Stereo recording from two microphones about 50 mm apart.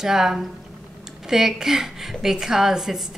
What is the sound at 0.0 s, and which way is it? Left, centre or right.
A woman's voice, centre.